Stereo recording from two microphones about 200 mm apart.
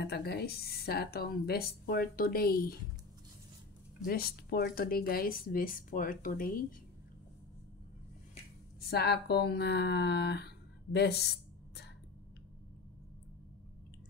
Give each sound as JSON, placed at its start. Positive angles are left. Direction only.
{"t": 0.0, "sound": "speech", "side_deg": 55}
{"t": 4.0, "sound": "speech", "side_deg": 50}
{"t": 8.9, "sound": "speech", "side_deg": 55}